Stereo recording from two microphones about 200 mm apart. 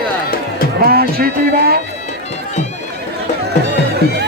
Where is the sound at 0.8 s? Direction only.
50° right (ahead or behind).